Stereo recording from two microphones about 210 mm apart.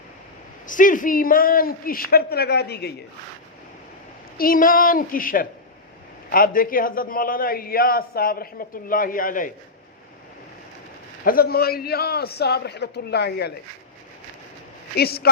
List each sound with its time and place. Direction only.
0.7 s a man's voice: 40° left (ahead or behind)
4.4 s a woman's voice: 40° left (ahead or behind)
11.3 s a man's voice: 45° left (ahead or behind)
14.9 s a man's voice: 50° left (ahead or behind)